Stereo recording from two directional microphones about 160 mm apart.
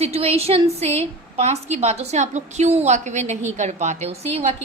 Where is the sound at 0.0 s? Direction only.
40° right (ahead or behind).